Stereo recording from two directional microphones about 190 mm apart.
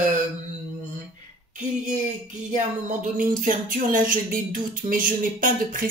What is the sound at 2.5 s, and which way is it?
Speech, 40° right (ahead or behind).